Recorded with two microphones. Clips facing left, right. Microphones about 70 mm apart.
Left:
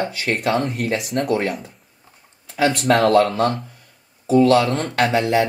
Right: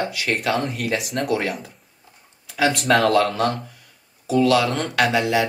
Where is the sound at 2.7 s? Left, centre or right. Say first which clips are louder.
Left 1 dB; right.